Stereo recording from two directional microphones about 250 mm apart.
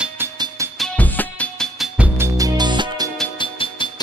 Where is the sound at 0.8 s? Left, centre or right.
Centre.